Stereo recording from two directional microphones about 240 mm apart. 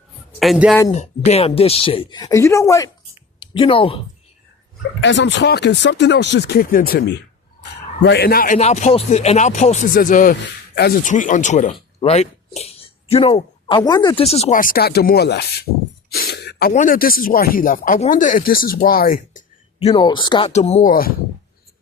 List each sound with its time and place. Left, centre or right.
0.3 s a man's voice: centre
0.9 s a man's voice: left
4.9 s a man's voice: left
19.8 s a man's voice: left